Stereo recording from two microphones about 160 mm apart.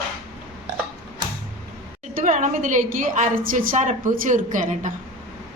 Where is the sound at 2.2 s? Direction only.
50° right (ahead or behind).